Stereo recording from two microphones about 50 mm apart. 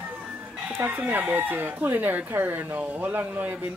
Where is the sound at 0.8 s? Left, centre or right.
Right.